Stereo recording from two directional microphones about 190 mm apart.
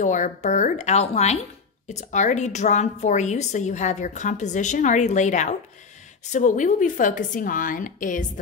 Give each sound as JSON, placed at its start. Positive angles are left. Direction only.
{"t": 0.0, "sound": "a woman's voice", "side_deg": 40}